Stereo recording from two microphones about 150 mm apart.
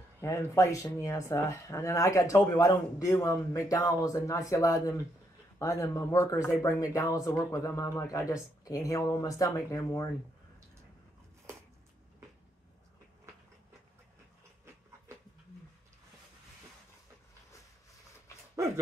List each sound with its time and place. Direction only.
0.2 s speech: 20° left (ahead or behind)